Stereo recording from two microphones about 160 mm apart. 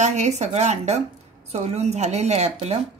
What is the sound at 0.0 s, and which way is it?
A woman's voice, 45° right (ahead or behind).